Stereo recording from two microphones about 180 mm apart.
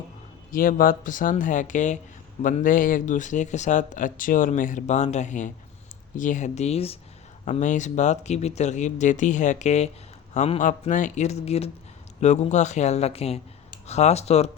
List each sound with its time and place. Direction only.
0.5 s speech: 50° left (ahead or behind)